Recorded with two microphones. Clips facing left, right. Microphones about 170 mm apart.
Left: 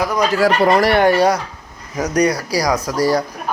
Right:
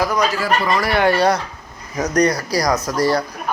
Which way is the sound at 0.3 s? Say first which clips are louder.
Left 6 dB; 75° left (ahead or behind).